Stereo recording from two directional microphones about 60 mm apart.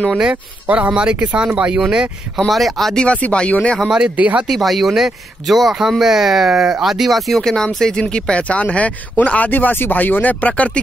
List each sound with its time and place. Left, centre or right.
0.1 s speech: centre
2.3 s speech: centre
3.0 s speech: left
4.2 s speech: right
4.5 s speech: centre; by 10.8 s left